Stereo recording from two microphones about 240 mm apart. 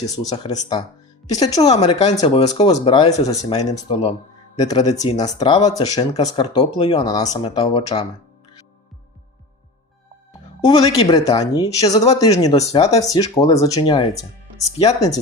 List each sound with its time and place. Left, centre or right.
0.0 s speech: centre
10.7 s speech: left